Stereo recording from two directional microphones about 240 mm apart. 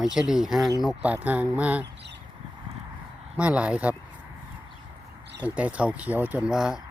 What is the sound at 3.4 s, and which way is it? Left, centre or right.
Speech, centre.